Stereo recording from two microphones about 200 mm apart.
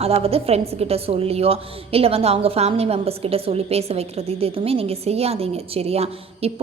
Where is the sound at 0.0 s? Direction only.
30° right (ahead or behind).